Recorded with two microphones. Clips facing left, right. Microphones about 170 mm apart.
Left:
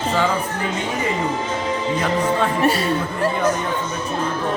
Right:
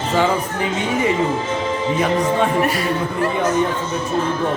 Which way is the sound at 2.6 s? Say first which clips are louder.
Left 1 dB; 30° left (ahead or behind).